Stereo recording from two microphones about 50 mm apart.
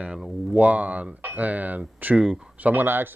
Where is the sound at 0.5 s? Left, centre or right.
Right.